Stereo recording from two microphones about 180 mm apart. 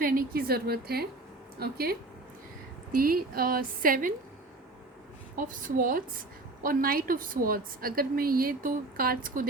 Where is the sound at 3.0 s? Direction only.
55° right (ahead or behind).